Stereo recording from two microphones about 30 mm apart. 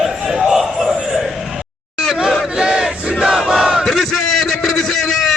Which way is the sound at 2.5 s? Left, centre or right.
Right.